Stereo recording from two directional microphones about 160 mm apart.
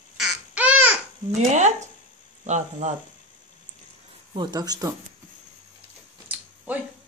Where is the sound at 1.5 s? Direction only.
45° right (ahead or behind).